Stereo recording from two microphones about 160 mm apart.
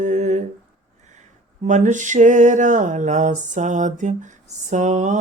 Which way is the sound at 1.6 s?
50° right (ahead or behind).